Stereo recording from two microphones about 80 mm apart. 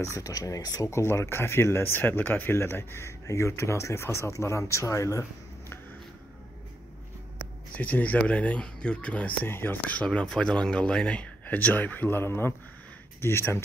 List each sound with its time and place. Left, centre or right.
0.0 s speech: left
0.8 s speech: left
7.7 s speech: centre
10.0 s speech: centre; by 13.6 s left